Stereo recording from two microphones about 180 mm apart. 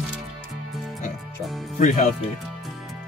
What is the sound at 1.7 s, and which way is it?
Speech, 40° left (ahead or behind).